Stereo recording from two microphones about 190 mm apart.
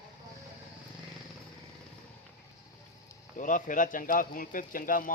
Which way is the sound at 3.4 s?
40° left (ahead or behind).